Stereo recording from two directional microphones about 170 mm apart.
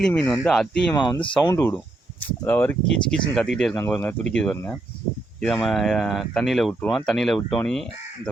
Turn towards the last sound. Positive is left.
turn(degrees=5)  # may be behind; listen again after turning